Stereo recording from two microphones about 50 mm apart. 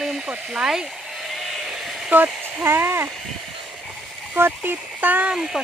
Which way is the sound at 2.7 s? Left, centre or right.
Right.